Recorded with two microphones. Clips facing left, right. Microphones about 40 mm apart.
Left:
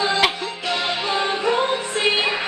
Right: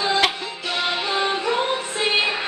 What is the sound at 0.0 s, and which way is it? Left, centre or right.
Music, centre.